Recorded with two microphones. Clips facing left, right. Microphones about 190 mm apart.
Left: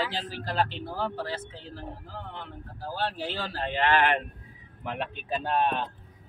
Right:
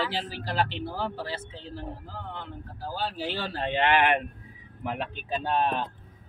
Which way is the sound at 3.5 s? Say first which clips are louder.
Right 1 dB; 25° right (ahead or behind).